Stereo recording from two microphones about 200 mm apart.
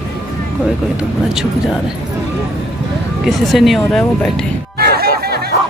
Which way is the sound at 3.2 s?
Centre (ahead or behind).